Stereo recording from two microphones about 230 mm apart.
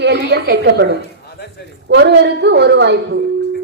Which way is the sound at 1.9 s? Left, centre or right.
Right.